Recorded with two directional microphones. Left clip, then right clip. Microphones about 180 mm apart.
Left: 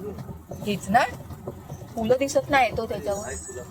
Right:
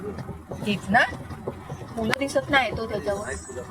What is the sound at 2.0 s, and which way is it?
Speech, 30° left (ahead or behind).